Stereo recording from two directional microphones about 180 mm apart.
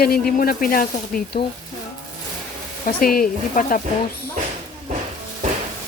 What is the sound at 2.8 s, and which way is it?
Speech, 50° left (ahead or behind).